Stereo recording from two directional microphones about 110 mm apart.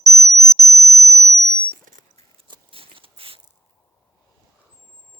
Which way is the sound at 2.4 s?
50° right (ahead or behind).